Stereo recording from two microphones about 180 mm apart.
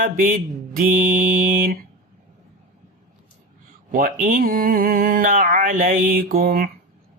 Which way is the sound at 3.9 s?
50° right (ahead or behind).